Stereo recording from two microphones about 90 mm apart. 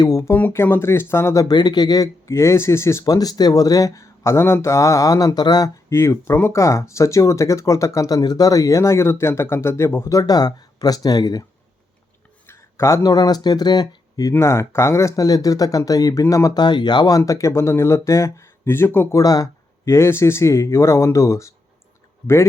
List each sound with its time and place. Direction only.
0.0 s speech: 40° left (ahead or behind)
0.3 s speech: 25° left (ahead or behind)
1.5 s speech: 50° left (ahead or behind)
5.9 s speech: 30° left (ahead or behind)
12.5 s a sound: 30° left (ahead or behind)
13.0 s speech: 45° left (ahead or behind)
14.3 s speech: 30° left (ahead or behind)
16.6 s speech: 55° left (ahead or behind); by 19.0 s 25° left (ahead or behind)
19.1 s speech: 45° left (ahead or behind)